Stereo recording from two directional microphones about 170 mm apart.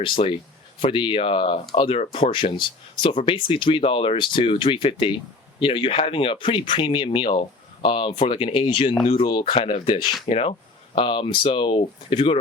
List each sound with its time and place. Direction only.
0.0 s speech: 35° left (ahead or behind)